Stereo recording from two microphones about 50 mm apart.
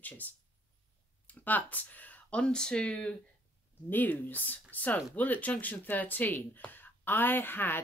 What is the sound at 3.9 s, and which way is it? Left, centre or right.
Speech, left.